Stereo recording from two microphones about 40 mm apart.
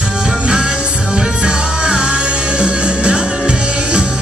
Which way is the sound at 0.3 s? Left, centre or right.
Right.